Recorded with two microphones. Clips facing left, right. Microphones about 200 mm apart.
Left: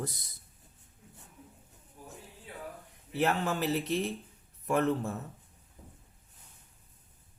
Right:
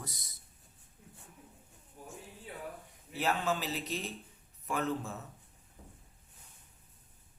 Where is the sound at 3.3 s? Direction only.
60° left (ahead or behind).